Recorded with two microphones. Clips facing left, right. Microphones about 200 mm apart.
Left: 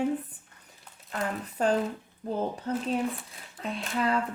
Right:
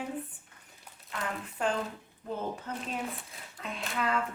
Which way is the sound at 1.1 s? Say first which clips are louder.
Left 5 dB; 40° left (ahead or behind).